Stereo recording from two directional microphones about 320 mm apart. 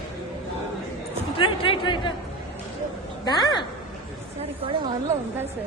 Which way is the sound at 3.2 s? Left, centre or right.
Centre.